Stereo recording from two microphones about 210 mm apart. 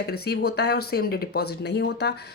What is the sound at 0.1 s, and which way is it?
A woman's voice, 50° left (ahead or behind).